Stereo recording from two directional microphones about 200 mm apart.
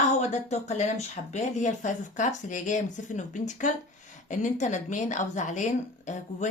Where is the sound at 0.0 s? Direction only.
35° left (ahead or behind).